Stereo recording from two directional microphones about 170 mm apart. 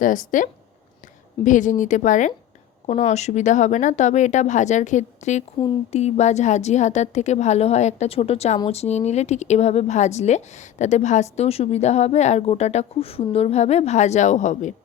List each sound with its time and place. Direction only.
0.0 s speech: 50° left (ahead or behind)
1.5 s a woman's voice: 50° left (ahead or behind)